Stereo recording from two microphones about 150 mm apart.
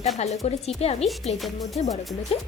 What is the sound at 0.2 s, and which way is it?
Speech, 45° left (ahead or behind).